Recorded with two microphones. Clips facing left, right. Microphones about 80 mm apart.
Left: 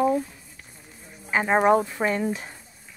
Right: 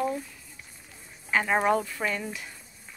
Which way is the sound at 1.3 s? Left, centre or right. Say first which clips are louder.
Left 5 dB; left.